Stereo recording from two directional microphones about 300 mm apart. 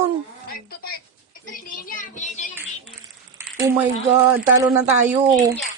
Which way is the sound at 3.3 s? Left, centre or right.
Centre.